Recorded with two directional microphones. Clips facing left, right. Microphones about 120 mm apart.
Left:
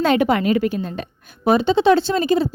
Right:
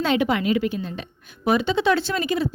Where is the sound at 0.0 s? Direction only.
50° left (ahead or behind).